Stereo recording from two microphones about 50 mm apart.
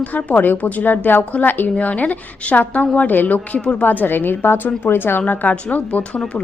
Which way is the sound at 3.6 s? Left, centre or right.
Left.